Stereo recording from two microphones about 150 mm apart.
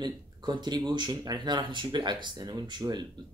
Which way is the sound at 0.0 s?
30° right (ahead or behind).